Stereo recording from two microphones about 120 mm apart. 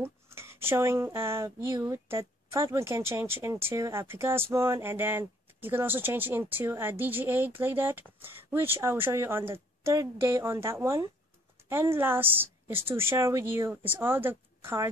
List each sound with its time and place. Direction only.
0.0 s a woman's voice: 20° right (ahead or behind)